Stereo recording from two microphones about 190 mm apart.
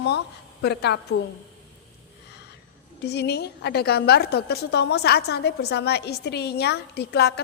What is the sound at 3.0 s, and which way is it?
A woman's voice, 60° left (ahead or behind).